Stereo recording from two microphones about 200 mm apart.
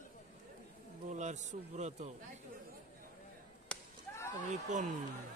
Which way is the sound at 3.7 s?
5° left (ahead or behind).